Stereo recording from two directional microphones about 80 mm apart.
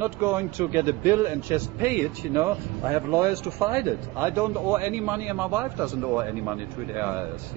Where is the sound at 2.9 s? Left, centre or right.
Right.